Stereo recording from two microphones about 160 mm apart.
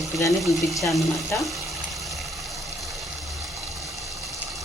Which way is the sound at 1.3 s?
15° left (ahead or behind).